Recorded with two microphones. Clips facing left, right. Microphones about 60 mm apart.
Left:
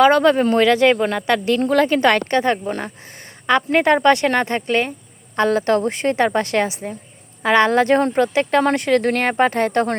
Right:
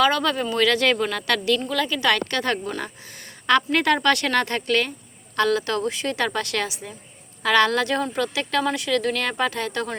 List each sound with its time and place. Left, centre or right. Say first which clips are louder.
0.0 s a woman's voice: left 8 dB; left
1.6 s a woman's voice: left 7 dB; left
2.4 s a woman's voice: left 5 dB; left
8.6 s speech: left 6 dB; left